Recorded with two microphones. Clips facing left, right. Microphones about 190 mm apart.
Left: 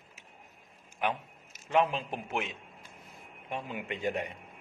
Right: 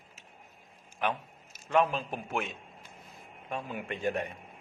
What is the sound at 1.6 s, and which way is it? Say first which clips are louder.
Speech: right 1 dB; 20° left (ahead or behind).